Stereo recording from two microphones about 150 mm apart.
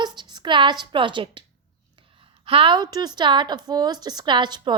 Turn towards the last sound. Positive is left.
turn(degrees=-30)  # may be behind; listen again after turning